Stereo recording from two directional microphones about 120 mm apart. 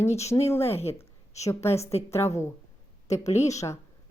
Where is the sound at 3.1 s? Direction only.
70° left (ahead or behind).